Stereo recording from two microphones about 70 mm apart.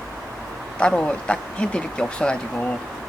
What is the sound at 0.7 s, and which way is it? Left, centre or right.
Speech, centre.